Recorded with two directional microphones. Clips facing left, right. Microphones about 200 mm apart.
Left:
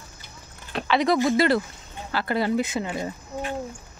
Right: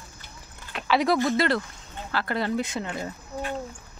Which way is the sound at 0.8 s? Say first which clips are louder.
Left 1 dB; 5° right (ahead or behind).